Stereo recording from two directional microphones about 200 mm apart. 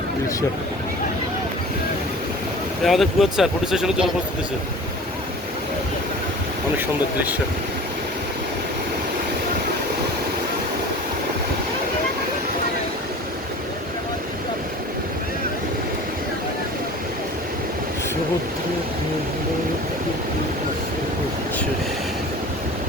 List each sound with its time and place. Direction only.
2.8 s speech: centre (ahead or behind)
6.7 s speech: 10° right (ahead or behind)